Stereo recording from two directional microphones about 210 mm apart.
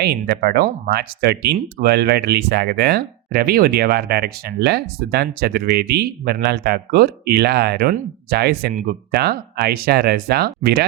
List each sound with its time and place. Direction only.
0.0 s speech: 50° right (ahead or behind)